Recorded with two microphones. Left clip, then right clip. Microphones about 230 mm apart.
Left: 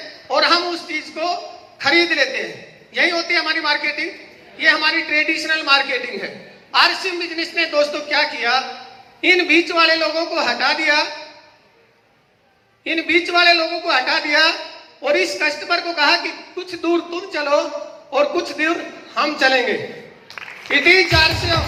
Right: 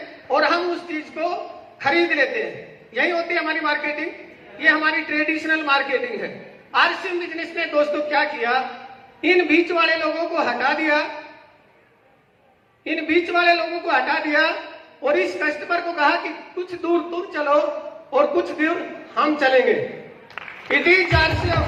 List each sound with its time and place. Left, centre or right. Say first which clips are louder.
0.3 s a sound: left 3 dB; left
1.8 s a man's voice: left 3 dB; left
12.8 s a man's voice: left 3 dB; left
20.7 s a man's voice: left 3 dB; left